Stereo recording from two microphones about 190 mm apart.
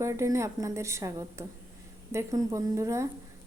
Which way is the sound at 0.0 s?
15° right (ahead or behind).